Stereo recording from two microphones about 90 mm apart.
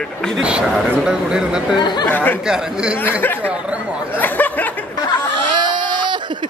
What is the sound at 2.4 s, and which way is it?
Speech, 5° right (ahead or behind).